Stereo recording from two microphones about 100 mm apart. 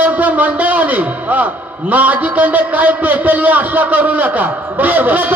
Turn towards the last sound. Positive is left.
turn(degrees=-15)  # may be behind; listen again after turning